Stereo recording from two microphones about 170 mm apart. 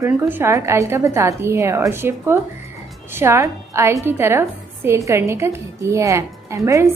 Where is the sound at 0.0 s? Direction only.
15° right (ahead or behind).